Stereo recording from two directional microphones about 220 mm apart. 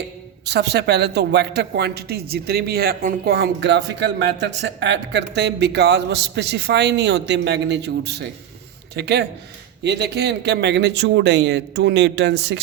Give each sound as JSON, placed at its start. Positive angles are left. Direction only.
{"t": 0.4, "sound": "speech", "side_deg": -50}